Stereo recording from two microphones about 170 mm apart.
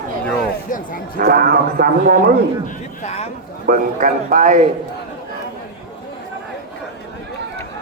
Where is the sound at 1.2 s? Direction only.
65° right (ahead or behind).